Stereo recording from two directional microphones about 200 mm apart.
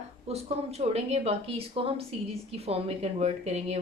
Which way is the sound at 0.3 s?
30° right (ahead or behind).